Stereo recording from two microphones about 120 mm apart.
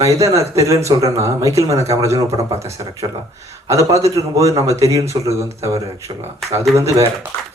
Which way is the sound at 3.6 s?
25° right (ahead or behind).